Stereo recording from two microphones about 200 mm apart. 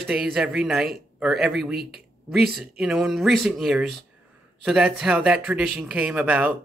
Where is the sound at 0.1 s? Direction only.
Centre (ahead or behind).